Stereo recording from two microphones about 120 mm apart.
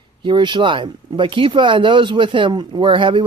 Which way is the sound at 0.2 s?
40° right (ahead or behind).